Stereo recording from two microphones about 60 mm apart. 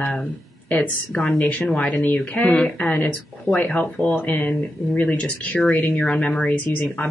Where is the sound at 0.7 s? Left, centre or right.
Left.